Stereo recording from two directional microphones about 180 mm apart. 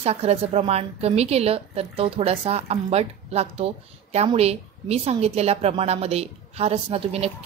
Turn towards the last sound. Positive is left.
turn(degrees=-35)  # may be behind; listen again after turning